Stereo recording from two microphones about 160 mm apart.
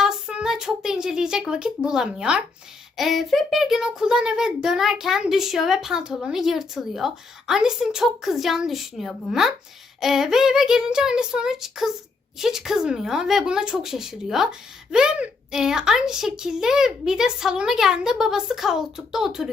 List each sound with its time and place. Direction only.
0.0 s a child's voice: 5° right (ahead or behind)